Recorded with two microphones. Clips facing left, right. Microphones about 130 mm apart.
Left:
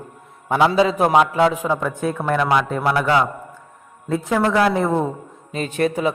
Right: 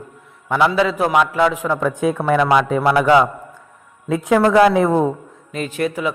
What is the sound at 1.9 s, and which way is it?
Speech, 10° right (ahead or behind).